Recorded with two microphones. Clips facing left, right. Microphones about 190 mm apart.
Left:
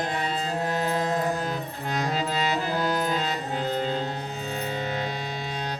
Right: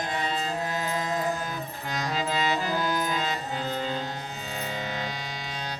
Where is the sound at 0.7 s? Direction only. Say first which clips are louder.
Left 4 dB; 60° left (ahead or behind).